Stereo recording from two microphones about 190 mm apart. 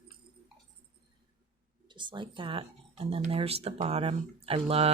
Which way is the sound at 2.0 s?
25° right (ahead or behind).